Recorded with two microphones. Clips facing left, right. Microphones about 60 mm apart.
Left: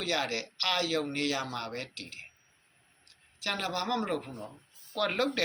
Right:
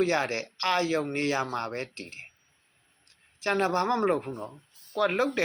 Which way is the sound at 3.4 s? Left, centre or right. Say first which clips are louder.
Right 8 dB; right.